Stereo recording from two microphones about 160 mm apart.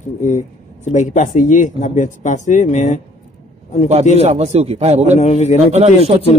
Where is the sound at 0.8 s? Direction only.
50° left (ahead or behind).